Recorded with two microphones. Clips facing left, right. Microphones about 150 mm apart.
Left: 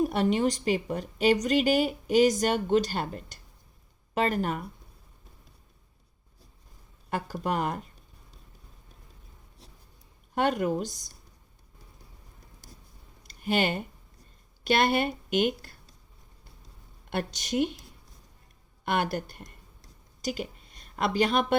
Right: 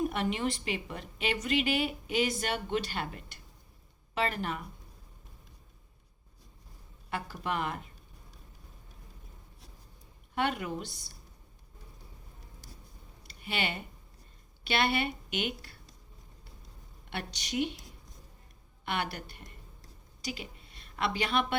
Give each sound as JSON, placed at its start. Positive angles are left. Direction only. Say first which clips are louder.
{"t": 0.0, "sound": "a woman's voice", "louder": "left 6 dB", "side_deg": 35}
{"t": 7.1, "sound": "a woman's voice", "louder": "left 5 dB", "side_deg": 45}
{"t": 10.3, "sound": "a woman's voice", "louder": "left 6 dB", "side_deg": 45}
{"t": 13.4, "sound": "a woman's voice", "louder": "left 8 dB", "side_deg": 45}
{"t": 17.1, "sound": "a woman's voice", "louder": "left 7 dB", "side_deg": 45}
{"t": 18.9, "sound": "a woman's voice", "louder": "left 7 dB", "side_deg": 45}